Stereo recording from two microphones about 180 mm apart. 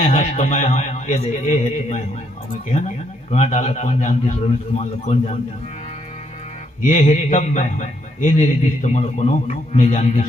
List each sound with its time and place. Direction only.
0.1 s a man's voice: 45° left (ahead or behind)
3.3 s a man's voice: 40° left (ahead or behind)
6.8 s a man's voice: 40° left (ahead or behind)